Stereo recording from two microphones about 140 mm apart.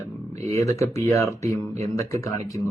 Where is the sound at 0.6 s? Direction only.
20° left (ahead or behind).